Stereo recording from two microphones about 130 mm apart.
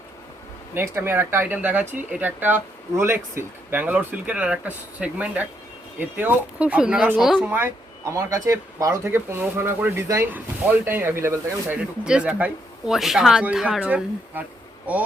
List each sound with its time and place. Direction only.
0.7 s speech: 15° right (ahead or behind)
7.5 s speech: 20° right (ahead or behind)
12.0 s speech: 5° right (ahead or behind)